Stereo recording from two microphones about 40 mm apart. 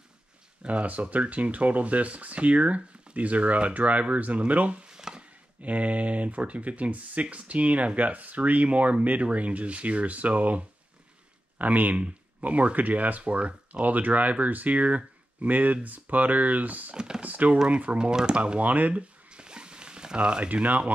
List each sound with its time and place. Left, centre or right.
0.6 s speech: right
4.8 s a sound: centre
5.6 s speech: right
16.9 s speech: right
17.2 s speech: right
19.3 s zipper: right
20.4 s speech: right